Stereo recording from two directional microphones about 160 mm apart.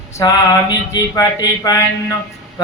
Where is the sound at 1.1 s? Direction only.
20° left (ahead or behind).